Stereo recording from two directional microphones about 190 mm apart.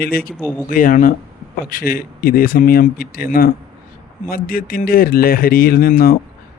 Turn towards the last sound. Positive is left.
turn(degrees=50)  # may be behind; listen again after turning